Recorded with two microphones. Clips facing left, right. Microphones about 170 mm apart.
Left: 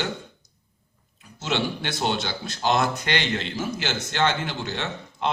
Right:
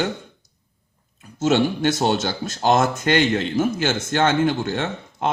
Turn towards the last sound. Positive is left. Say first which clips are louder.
# right 5 dB
turn(degrees=-50)  # may be behind; listen again after turning